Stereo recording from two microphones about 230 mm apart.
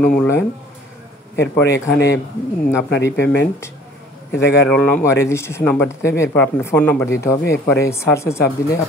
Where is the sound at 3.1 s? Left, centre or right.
Left.